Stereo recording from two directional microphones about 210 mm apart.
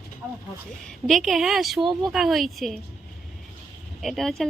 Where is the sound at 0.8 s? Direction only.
Centre (ahead or behind).